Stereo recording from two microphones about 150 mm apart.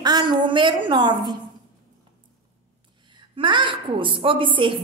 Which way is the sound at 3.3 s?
35° right (ahead or behind).